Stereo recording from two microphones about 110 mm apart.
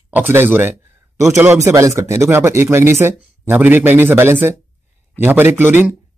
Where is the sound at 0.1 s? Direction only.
20° right (ahead or behind).